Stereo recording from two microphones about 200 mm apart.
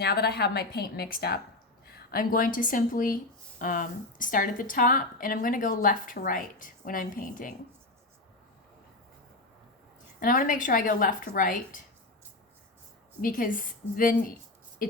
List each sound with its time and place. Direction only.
0.0 s a woman's voice: 55° left (ahead or behind)
10.2 s a woman's voice: 45° left (ahead or behind)
13.2 s a woman's voice: 45° left (ahead or behind)